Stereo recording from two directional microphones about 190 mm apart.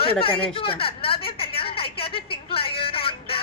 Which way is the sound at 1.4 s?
30° left (ahead or behind).